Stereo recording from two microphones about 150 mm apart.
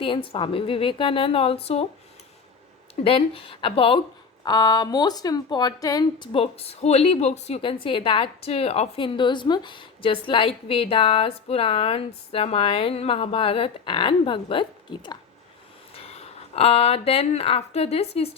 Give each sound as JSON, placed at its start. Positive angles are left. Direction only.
{"t": 0.0, "sound": "a woman's voice", "side_deg": 35}
{"t": 3.0, "sound": "a woman's voice", "side_deg": 40}
{"t": 4.4, "sound": "speech", "side_deg": 25}
{"t": 6.3, "sound": "a woman's voice", "side_deg": 40}
{"t": 16.0, "sound": "speech", "side_deg": 45}